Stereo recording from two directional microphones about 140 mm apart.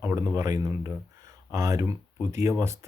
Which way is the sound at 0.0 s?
20° right (ahead or behind).